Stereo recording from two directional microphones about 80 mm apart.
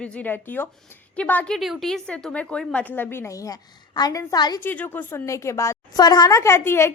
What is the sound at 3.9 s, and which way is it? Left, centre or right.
Speech, left.